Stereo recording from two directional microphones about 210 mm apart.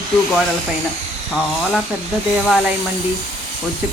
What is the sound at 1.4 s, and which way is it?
Speech, centre (ahead or behind).